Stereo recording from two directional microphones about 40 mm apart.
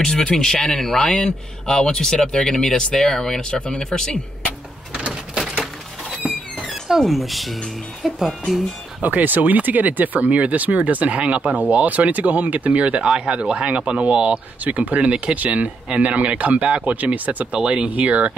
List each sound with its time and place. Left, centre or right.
0.0 s speech: centre
3.4 s speech: left
6.2 s a sound: right
7.0 s speech: centre
9.0 s speech: right
17.5 s speech: right